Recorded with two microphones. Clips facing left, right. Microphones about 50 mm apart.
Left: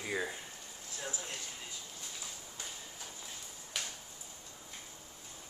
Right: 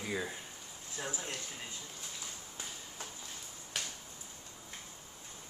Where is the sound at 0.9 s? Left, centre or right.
Right.